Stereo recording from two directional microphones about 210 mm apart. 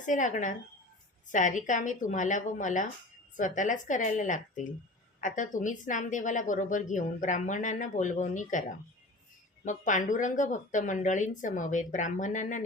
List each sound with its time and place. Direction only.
0.0 s a woman's voice: 35° left (ahead or behind)
9.6 s a woman's voice: 35° left (ahead or behind)